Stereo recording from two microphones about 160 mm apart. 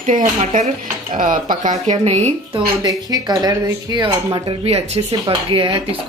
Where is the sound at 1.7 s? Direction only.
40° right (ahead or behind).